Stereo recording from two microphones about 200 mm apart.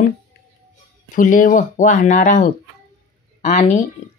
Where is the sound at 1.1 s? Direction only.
40° left (ahead or behind).